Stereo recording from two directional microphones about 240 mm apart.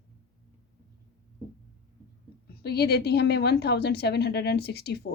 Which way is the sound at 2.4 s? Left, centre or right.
Left.